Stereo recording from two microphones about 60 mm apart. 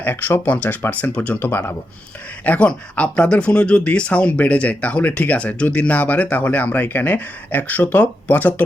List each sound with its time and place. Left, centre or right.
0.0 s speech: left
1.4 s a man's voice: left
2.4 s speech: left